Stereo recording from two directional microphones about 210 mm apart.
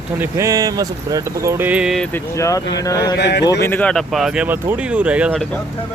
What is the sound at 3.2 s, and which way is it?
Speech, 55° left (ahead or behind).